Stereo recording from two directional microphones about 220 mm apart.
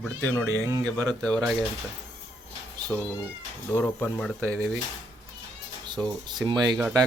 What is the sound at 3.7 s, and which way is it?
Speech, 10° left (ahead or behind).